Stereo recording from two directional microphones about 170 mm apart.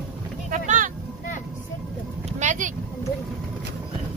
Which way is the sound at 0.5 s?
50° right (ahead or behind).